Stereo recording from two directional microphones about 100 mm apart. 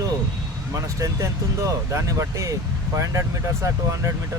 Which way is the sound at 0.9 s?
35° right (ahead or behind).